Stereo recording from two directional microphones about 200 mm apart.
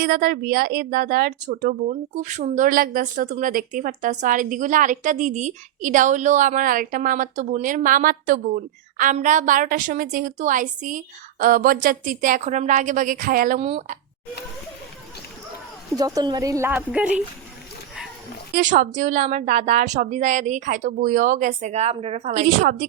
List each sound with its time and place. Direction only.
0.0 s speech: 50° right (ahead or behind)
13.6 s speech: 30° right (ahead or behind)
16.0 s speech: 20° right (ahead or behind)
18.5 s speech: 40° right (ahead or behind)